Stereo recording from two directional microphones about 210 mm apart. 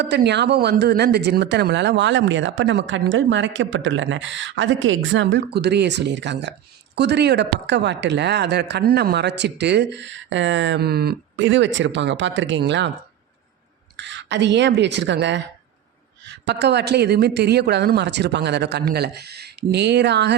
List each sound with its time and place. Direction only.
0.0 s speech: 55° right (ahead or behind)
13.9 s speech: 60° right (ahead or behind)